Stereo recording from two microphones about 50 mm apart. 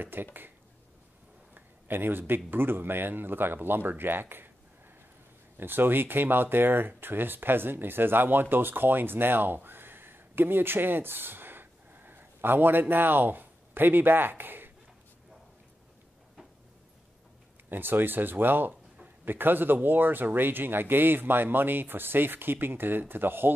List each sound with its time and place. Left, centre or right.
0.0 s speech: right
1.5 s speech: right
5.6 s speech: right
17.6 s speech: right